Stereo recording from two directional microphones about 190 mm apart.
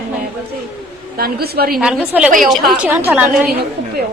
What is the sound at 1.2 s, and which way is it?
Speech, 55° right (ahead or behind).